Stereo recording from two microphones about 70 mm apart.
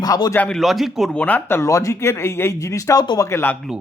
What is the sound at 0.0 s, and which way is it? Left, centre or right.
Speech, left.